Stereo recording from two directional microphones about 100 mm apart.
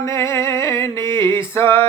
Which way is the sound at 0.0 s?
25° left (ahead or behind).